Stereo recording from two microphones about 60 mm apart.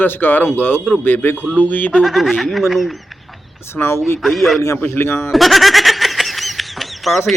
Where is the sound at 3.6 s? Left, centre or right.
Left.